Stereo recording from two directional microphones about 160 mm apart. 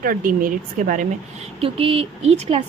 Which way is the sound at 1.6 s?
35° right (ahead or behind).